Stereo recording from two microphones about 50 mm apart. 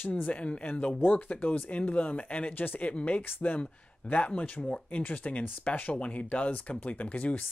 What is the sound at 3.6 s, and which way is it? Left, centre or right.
Speech, left.